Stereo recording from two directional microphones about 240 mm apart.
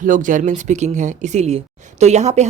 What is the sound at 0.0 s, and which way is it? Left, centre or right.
Speech, right.